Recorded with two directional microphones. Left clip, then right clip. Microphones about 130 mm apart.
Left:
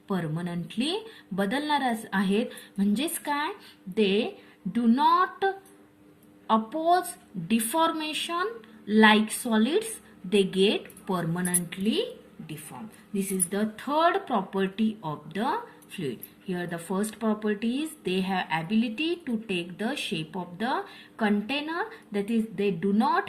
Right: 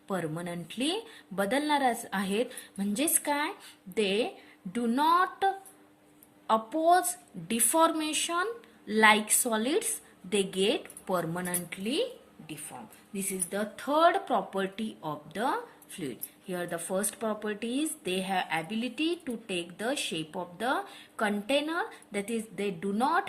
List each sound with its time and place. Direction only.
0.1 s a woman's voice: 35° right (ahead or behind)
13.1 s speech: 25° right (ahead or behind)